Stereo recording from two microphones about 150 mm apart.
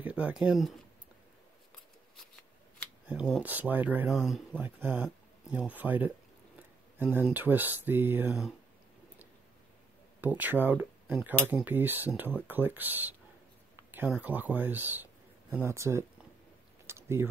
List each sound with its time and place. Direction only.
0.0 s speech: 10° right (ahead or behind)
3.1 s speech: 10° right (ahead or behind)
10.2 s speech: 10° right (ahead or behind)
16.8 s a sound: 15° right (ahead or behind)